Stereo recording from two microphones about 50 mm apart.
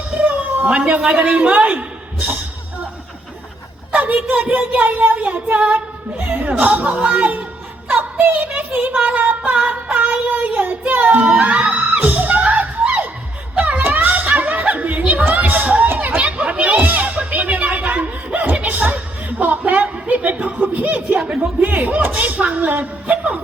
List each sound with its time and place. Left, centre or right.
0.1 s a sound: right
0.8 s speech: right
1.5 s a sound: right
3.9 s speech: right
8.9 s speech: centre
9.6 s child singing: right
11.4 s music: right
13.6 s snicker: right
18.3 s a sound: right
21.2 s speech: right